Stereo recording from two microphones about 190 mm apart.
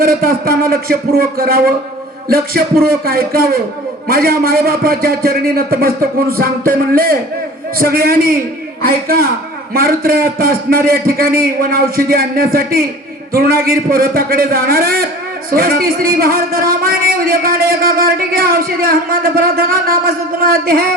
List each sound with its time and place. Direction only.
0.0 s a man's voice: 50° right (ahead or behind)